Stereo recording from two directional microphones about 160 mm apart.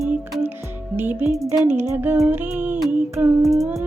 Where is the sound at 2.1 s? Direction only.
10° right (ahead or behind).